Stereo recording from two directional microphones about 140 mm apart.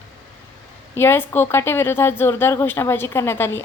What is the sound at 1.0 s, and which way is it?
A woman's voice, 15° left (ahead or behind).